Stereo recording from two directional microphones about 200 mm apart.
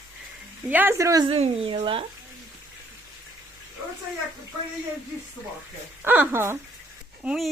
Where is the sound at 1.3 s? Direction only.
30° right (ahead or behind).